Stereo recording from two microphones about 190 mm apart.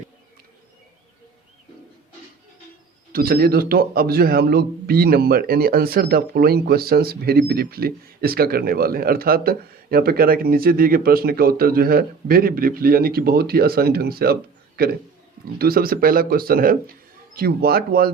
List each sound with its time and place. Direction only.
3.1 s a man's voice: 50° right (ahead or behind)